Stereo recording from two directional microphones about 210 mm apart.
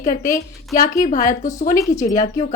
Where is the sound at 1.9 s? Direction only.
15° left (ahead or behind).